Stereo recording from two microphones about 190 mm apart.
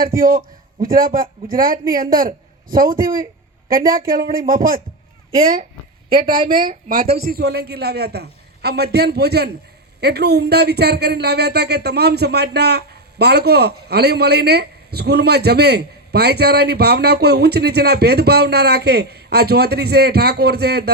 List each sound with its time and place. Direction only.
0.0 s a man's voice: 50° right (ahead or behind)
6.5 s speech: 45° right (ahead or behind)